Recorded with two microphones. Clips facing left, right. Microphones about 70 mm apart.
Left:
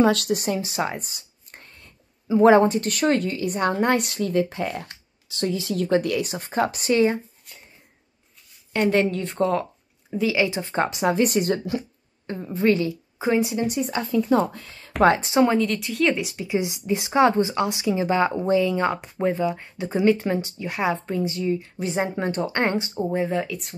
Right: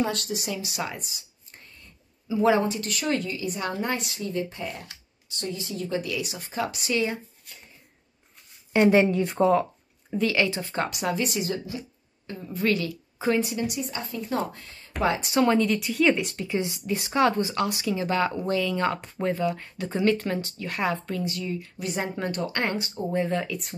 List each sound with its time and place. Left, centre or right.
0.0 s a woman's voice: left
0.3 s speech: left
5.5 s a woman's voice: left
8.7 s speech: centre
10.4 s speech: left
11.2 s a woman's voice: left
12.3 s speech: left
15.5 s speech: centre; by 22.9 s left
22.9 s speech: centre
23.4 s speech: centre